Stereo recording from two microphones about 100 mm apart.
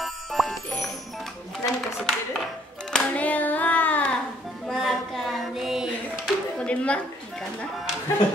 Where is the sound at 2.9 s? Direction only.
10° left (ahead or behind).